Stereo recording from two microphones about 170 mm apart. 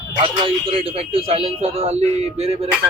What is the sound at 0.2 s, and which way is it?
A man's voice, 30° right (ahead or behind).